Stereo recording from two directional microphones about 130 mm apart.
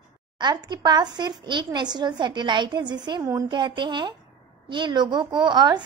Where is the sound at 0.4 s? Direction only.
35° right (ahead or behind).